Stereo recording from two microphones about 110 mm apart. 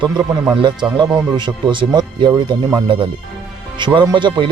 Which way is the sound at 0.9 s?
45° right (ahead or behind).